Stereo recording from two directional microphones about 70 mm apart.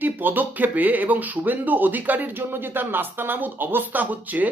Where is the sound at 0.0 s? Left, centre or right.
Right.